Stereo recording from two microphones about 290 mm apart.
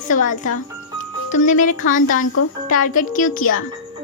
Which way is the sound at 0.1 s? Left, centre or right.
Left.